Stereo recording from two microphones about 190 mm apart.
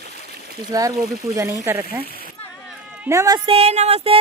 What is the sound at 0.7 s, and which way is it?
Speech, 20° right (ahead or behind).